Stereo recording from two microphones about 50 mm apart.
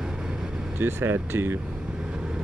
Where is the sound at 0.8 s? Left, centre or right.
Right.